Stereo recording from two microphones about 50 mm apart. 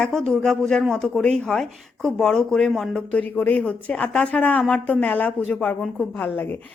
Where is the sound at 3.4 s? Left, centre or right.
Left.